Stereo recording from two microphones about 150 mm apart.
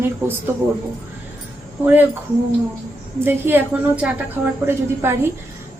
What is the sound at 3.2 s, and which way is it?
A woman's voice, 15° right (ahead or behind).